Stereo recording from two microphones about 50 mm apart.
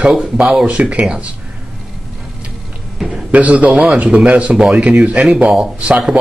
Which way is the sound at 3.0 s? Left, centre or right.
Centre.